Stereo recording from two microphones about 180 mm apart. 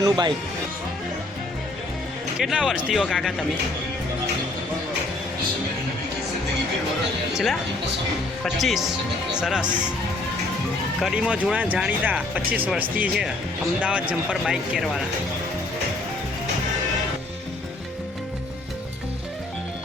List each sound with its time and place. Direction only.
0.0 s speech: 25° right (ahead or behind)
2.4 s speech: 5° right (ahead or behind)
7.3 s speech: centre (ahead or behind)
11.0 s speech: 5° right (ahead or behind)